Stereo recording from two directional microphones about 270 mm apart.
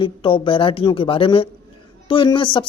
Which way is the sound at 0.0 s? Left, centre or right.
Centre.